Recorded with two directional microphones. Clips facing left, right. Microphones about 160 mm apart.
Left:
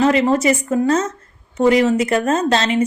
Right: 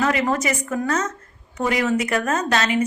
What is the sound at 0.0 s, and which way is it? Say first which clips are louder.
Speech: left 6 dB; 25° left (ahead or behind).